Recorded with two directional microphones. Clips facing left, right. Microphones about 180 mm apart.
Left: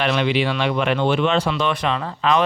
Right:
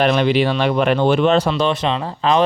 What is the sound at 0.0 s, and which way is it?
Speech, 40° right (ahead or behind).